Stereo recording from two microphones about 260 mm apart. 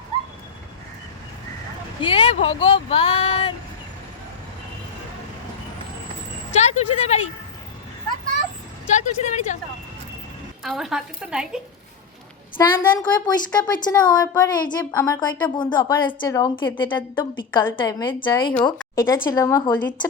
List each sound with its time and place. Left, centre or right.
2.0 s speech: centre
6.5 s speech: left
8.9 s a woman's voice: left
10.6 s a woman's voice: centre
12.5 s a woman's voice: centre